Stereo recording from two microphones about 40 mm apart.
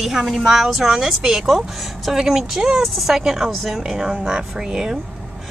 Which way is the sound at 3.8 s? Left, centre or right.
Right.